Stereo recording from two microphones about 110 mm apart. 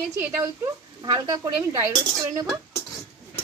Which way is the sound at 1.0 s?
35° right (ahead or behind).